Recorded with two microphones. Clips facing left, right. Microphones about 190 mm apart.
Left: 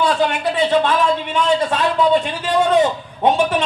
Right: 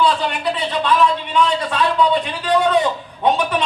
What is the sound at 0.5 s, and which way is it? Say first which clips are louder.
Speech: left 4 dB; 45° left (ahead or behind).